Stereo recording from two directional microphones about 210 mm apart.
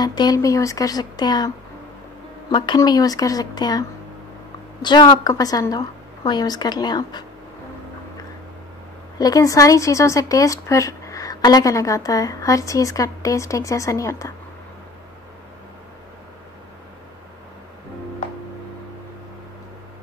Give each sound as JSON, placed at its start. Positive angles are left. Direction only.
{"t": 0.0, "sound": "a woman's voice", "side_deg": 20}
{"t": 2.5, "sound": "speech", "side_deg": 20}
{"t": 4.8, "sound": "a woman's voice", "side_deg": 20}
{"t": 9.2, "sound": "speech", "side_deg": 15}